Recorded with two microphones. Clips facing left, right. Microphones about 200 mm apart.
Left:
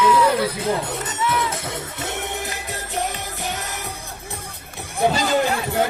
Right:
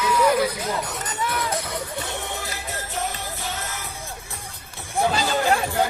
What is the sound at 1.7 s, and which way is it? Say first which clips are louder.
Music: left 1 dB; 20° left (ahead or behind).